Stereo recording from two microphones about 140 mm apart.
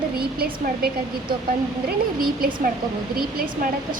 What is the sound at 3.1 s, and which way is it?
Speech, 85° right.